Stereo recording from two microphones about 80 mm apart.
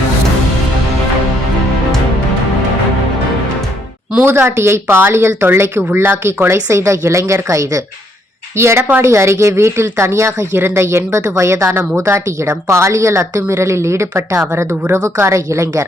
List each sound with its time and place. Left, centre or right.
4.3 s speech: right